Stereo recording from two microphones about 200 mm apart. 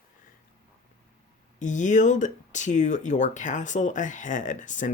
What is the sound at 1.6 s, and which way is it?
Speech, 40° left (ahead or behind).